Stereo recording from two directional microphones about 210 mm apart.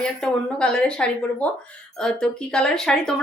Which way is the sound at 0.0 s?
5° left (ahead or behind).